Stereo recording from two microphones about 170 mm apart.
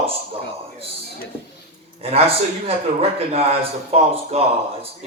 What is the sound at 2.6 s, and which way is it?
Speech, 35° right (ahead or behind).